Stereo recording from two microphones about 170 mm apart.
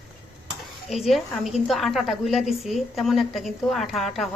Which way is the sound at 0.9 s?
Centre (ahead or behind).